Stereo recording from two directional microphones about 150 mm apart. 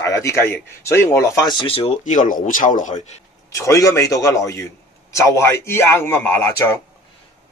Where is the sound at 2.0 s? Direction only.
55° left (ahead or behind).